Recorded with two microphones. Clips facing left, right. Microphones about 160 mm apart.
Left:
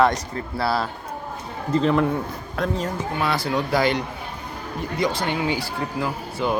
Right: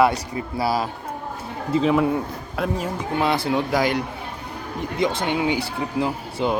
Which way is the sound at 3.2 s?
20° right (ahead or behind).